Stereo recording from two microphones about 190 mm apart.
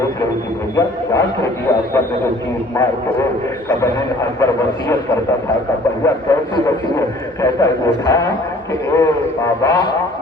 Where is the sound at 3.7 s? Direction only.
15° left (ahead or behind).